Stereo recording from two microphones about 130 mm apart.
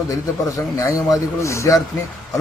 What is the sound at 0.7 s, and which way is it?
A man's voice, 25° left (ahead or behind).